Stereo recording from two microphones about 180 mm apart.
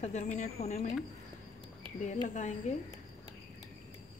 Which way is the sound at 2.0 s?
40° left (ahead or behind).